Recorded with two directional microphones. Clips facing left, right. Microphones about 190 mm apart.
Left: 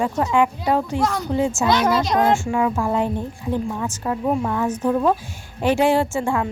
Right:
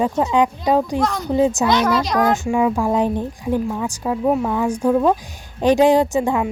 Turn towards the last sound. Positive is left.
turn(degrees=-20)  # may be behind; listen again after turning